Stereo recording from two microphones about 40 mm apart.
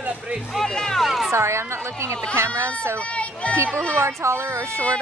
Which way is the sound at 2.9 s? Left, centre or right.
Left.